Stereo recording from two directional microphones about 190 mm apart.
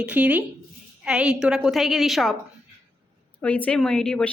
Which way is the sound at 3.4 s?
5° left (ahead or behind).